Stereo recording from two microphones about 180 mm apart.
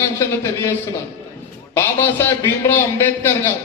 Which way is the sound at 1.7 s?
10° left (ahead or behind).